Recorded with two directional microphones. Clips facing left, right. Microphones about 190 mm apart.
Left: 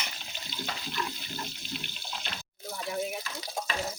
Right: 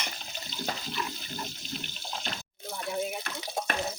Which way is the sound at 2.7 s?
Centre (ahead or behind).